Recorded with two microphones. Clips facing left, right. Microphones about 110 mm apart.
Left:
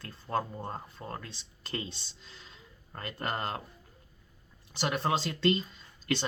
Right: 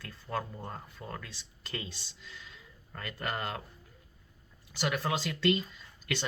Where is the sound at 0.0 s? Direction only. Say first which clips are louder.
Left 4 dB; 30° left (ahead or behind).